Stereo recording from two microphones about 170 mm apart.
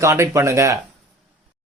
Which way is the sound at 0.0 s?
15° right (ahead or behind).